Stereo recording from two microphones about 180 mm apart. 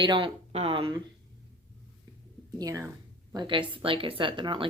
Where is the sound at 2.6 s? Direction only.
20° right (ahead or behind).